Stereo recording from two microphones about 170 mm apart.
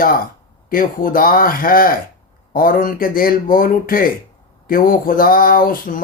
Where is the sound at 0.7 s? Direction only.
55° left (ahead or behind).